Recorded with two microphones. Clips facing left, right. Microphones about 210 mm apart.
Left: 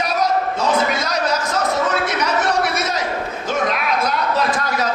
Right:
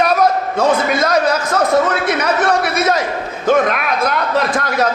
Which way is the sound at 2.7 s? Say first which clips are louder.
Right 5 dB; 55° right (ahead or behind).